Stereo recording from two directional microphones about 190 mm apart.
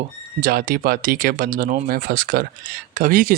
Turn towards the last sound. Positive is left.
turn(degrees=-45)  # may be behind; listen again after turning